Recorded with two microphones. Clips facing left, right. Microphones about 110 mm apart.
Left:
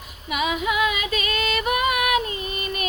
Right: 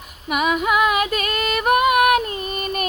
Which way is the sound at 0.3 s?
55° right (ahead or behind).